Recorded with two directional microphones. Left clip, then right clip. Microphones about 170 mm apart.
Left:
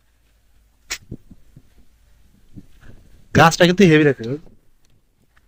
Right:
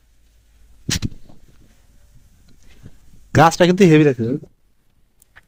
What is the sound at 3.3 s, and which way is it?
Speech, 20° right (ahead or behind).